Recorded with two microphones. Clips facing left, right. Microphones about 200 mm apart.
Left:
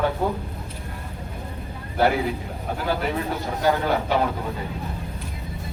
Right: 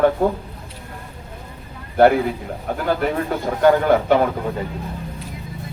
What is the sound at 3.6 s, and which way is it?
Speech, 55° right (ahead or behind).